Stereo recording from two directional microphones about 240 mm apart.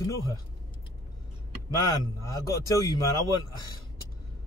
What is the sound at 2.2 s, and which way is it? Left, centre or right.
Speech, centre.